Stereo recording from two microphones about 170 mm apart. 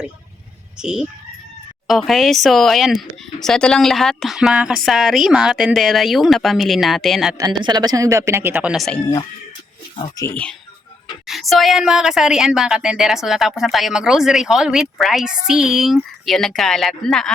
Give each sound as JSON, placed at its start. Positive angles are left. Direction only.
{"t": 0.8, "sound": "a woman's voice", "side_deg": -5}
{"t": 7.3, "sound": "speech", "side_deg": -25}
{"t": 10.0, "sound": "speech", "side_deg": 20}
{"t": 11.3, "sound": "a woman's voice", "side_deg": 0}